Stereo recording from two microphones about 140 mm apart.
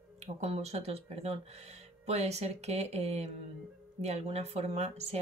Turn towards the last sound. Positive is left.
turn(degrees=-50)  # may be behind; listen again after turning